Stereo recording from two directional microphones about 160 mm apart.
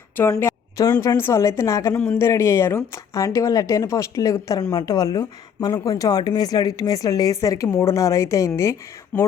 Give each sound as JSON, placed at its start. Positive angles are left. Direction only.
{"t": 0.2, "sound": "a woman's voice", "side_deg": 15}